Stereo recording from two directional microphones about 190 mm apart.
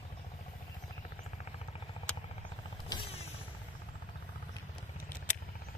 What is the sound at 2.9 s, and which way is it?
Vehicle, 25° left (ahead or behind).